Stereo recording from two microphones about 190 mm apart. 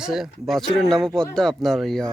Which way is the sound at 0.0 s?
Centre (ahead or behind).